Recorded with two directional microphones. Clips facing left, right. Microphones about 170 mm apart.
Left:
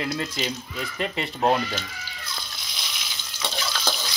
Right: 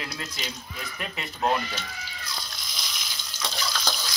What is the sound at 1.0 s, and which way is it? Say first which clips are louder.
Speech: left 5 dB; 25° left (ahead or behind).